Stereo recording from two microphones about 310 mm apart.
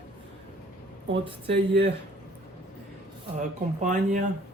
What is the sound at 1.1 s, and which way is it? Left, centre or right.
Speech, right.